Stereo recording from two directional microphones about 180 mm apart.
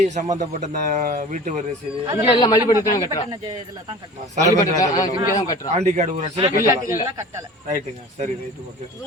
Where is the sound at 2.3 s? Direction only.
25° left (ahead or behind).